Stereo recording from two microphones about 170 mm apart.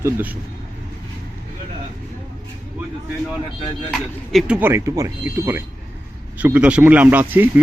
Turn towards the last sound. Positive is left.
turn(degrees=-10)  # may be behind; listen again after turning